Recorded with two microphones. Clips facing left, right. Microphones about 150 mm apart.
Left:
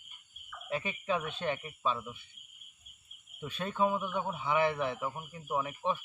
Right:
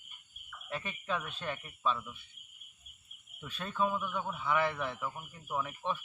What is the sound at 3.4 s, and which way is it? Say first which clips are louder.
A man's voice: left 3 dB; 20° left (ahead or behind).